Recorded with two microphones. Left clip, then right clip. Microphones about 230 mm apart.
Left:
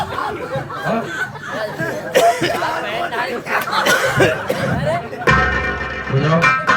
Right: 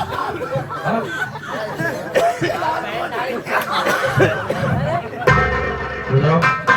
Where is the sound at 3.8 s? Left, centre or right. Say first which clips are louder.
Left 4 dB; left.